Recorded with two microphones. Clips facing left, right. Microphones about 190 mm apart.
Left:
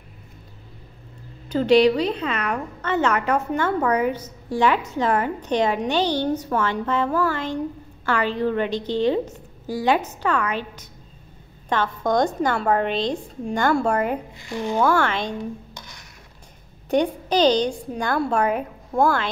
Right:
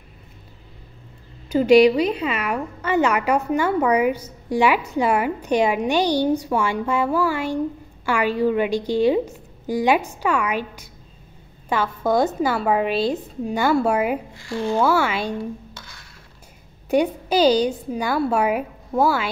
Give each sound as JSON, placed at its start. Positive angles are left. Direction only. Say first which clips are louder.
{"t": 1.5, "sound": "a woman's voice", "louder": "right 3 dB", "side_deg": -10}
{"t": 14.4, "sound": "speech", "louder": "right 4 dB", "side_deg": 20}
{"t": 14.8, "sound": "a woman's voice", "louder": "even", "side_deg": -5}
{"t": 15.7, "sound": "a sound", "louder": "left 1 dB", "side_deg": 15}
{"t": 16.9, "sound": "a woman's voice", "louder": "right 1 dB", "side_deg": -10}